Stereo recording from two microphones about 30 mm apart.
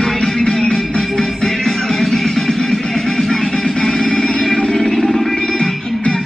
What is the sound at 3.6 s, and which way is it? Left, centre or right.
Music, left.